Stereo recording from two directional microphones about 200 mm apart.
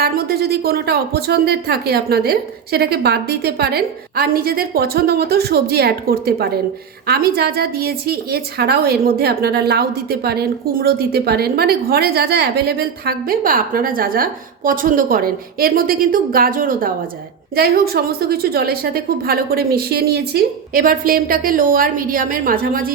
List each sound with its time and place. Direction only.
0.0 s a woman's voice: 50° right (ahead or behind)